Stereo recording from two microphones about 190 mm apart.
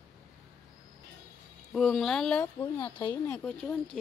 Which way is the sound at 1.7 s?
Centre (ahead or behind).